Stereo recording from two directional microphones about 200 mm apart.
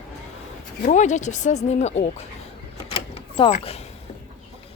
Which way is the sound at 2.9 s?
30° left (ahead or behind).